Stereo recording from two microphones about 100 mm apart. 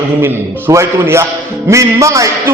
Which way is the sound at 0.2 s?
25° right (ahead or behind).